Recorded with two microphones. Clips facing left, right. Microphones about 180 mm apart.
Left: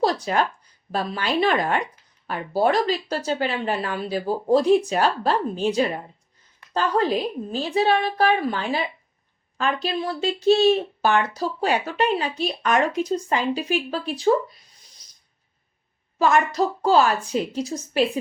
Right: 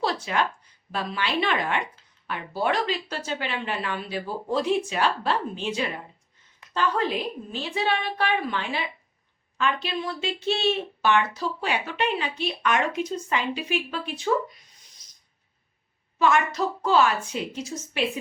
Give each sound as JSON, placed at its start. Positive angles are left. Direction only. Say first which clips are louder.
{"t": 0.0, "sound": "a sound", "louder": "left 5 dB", "side_deg": 40}
{"t": 0.9, "sound": "speech", "louder": "left 4 dB", "side_deg": 40}
{"t": 15.0, "sound": "rub", "louder": "left 2 dB", "side_deg": 35}
{"t": 16.1, "sound": "speech", "louder": "left 3 dB", "side_deg": 40}